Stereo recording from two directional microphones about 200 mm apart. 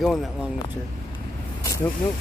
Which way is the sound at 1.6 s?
15° left (ahead or behind).